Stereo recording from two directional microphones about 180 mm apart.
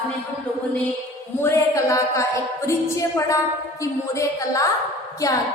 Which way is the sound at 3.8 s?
15° left (ahead or behind).